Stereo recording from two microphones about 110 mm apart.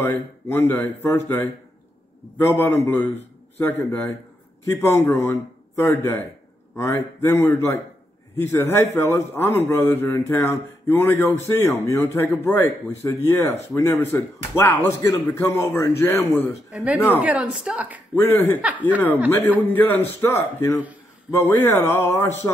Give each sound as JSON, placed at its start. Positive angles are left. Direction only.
{"t": 0.0, "sound": "a man's voice", "side_deg": 20}
{"t": 16.7, "sound": "a woman's voice", "side_deg": -10}
{"t": 18.1, "sound": "a man's voice", "side_deg": 20}
{"t": 18.6, "sound": "a woman's voice", "side_deg": -15}
{"t": 19.7, "sound": "a man's voice", "side_deg": 20}